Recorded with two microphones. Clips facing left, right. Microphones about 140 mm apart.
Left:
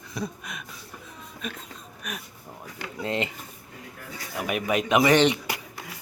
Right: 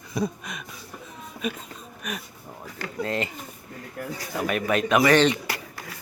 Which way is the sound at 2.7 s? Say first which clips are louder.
Right 1 dB; 20° left (ahead or behind).